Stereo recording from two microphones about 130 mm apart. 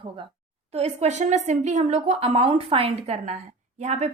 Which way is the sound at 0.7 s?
55° right (ahead or behind).